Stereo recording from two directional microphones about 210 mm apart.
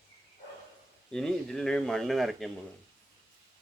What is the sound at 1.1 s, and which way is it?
Speech, centre (ahead or behind).